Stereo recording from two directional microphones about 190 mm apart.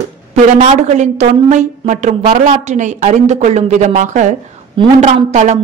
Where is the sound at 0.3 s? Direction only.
40° right (ahead or behind).